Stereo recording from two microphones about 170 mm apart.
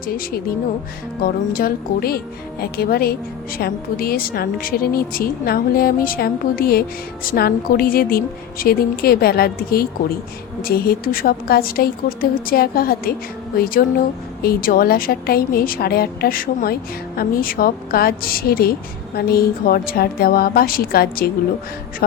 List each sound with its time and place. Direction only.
0.1 s a woman's voice: 60° left (ahead or behind)
14.4 s a woman's voice: 60° left (ahead or behind)